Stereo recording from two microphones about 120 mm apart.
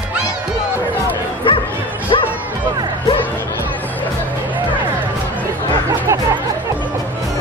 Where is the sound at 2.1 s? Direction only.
45° left (ahead or behind).